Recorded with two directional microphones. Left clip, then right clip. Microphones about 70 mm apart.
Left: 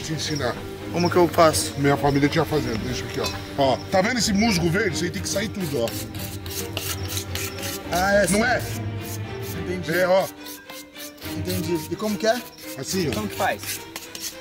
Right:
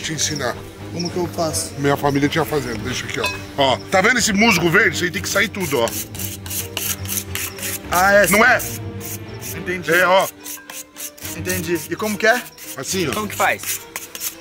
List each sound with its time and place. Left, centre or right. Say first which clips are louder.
0.0 s speech: right 6 dB; right
0.3 s chopping: right 3 dB; centre
1.1 s speech: left 6 dB; left
2.0 s speech: right 2 dB; centre
7.9 s speech: right 7 dB; right
9.7 s speech: right 6 dB; right
11.5 s speech: right 5 dB; right
13.1 s chopping: right 7 dB; centre